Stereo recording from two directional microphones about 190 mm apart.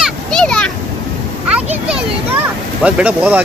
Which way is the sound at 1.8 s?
5° right (ahead or behind).